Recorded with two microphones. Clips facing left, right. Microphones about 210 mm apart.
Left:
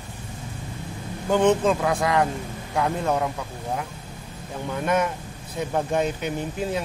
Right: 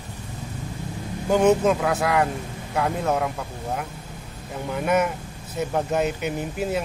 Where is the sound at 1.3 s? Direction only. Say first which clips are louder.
Right 1 dB; 10° right (ahead or behind).